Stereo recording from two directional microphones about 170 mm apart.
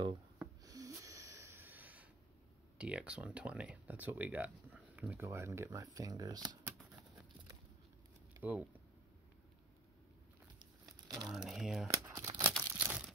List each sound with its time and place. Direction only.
0.4 s a sound: 20° right (ahead or behind)
2.8 s speech: 5° right (ahead or behind); by 6.6 s 25° right (ahead or behind)
8.4 s speech: 10° right (ahead or behind)
11.1 s crumpling: centre (ahead or behind)
11.9 s shuffling cards: 20° right (ahead or behind)
12.8 s a sound: 10° right (ahead or behind)